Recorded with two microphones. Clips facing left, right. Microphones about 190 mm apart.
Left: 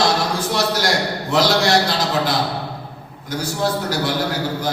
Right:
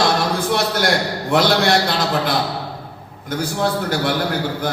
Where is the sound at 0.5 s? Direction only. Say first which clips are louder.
Even; 55° right (ahead or behind).